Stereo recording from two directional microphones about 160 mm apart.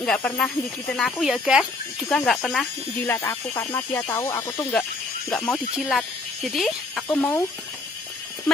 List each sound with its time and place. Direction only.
0.0 s speech: 5° left (ahead or behind)
1.2 s speech: 5° right (ahead or behind); by 5.9 s 10° left (ahead or behind)
5.9 s speech: centre (ahead or behind)